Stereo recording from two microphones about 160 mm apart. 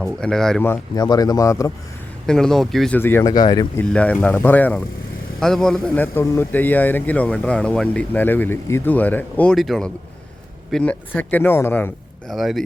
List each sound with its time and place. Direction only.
0.0 s speech: 5° left (ahead or behind)
0.9 s speech: 25° left (ahead or behind)
2.2 s speech: 5° left (ahead or behind)
3.0 s speech: 15° left (ahead or behind)
3.8 s a man's voice: 10° left (ahead or behind)
12.3 s speech: centre (ahead or behind)